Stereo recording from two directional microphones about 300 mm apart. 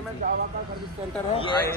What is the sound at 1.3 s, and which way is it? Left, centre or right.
Speech, centre.